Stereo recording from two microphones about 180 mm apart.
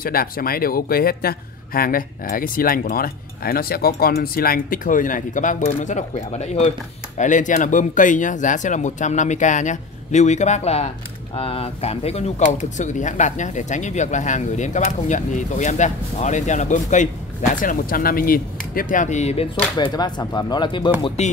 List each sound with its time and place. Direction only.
0.0 s speech: 55° left (ahead or behind); by 19.4 s 40° left (ahead or behind)
19.8 s speech: 25° left (ahead or behind)